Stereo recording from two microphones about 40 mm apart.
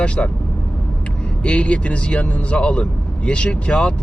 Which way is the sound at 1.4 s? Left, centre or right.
Left.